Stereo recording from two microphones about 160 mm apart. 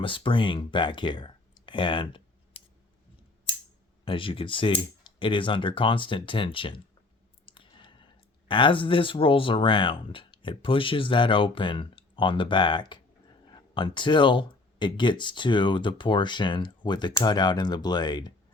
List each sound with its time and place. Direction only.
0.0 s speech: 30° left (ahead or behind)
4.0 s speech: 35° left (ahead or behind)